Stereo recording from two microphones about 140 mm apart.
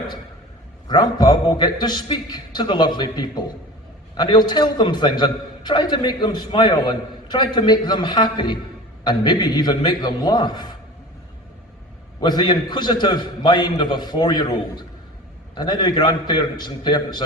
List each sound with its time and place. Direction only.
0.9 s a man's voice: 30° left (ahead or behind)
12.2 s a man's voice: 30° left (ahead or behind)